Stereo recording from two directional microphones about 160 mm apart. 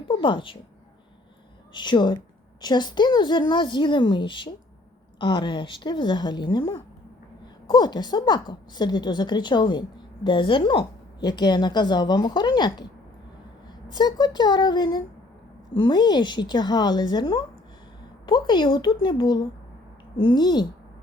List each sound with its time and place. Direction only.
0.1 s speech: 30° left (ahead or behind)
1.7 s a woman's voice: 30° left (ahead or behind)
13.9 s a woman's voice: 25° left (ahead or behind)